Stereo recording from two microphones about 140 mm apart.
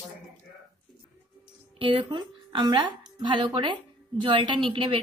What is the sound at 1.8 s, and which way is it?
A woman's voice, 35° right (ahead or behind).